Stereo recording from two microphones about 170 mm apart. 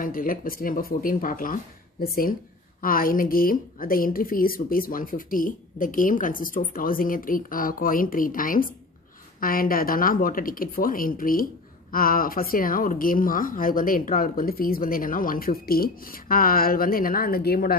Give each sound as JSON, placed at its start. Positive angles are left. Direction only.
{"t": 0.0, "sound": "speech", "side_deg": 55}